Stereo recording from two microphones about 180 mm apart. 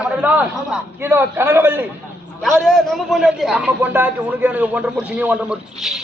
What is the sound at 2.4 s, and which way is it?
A man's voice, centre (ahead or behind).